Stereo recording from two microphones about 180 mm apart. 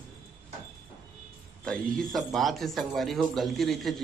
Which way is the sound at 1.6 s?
5° left (ahead or behind).